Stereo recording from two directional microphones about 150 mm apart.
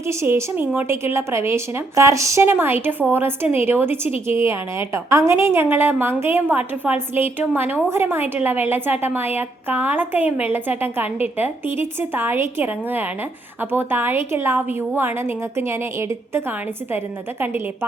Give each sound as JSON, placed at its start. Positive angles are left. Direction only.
{"t": 0.1, "sound": "a woman's voice", "side_deg": -20}